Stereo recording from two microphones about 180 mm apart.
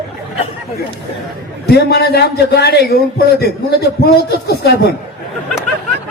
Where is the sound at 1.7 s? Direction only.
65° left (ahead or behind).